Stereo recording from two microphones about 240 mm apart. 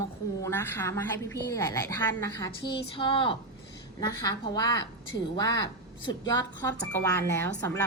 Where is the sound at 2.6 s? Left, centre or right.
Left.